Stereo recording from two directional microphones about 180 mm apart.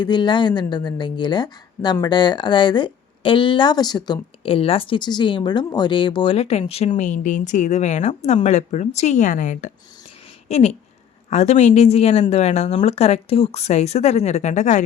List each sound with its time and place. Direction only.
0.0 s a woman's voice: 25° left (ahead or behind); by 14.8 s 40° left (ahead or behind)